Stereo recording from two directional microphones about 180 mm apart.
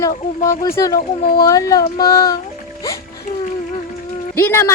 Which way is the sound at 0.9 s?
55° left (ahead or behind).